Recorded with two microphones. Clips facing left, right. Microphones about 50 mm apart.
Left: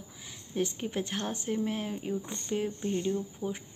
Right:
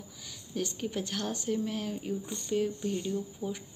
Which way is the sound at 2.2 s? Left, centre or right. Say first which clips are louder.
Right 2 dB; left.